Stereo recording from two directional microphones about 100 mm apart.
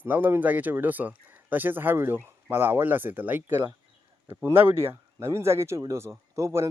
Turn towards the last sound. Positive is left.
turn(degrees=-30)  # may be behind; listen again after turning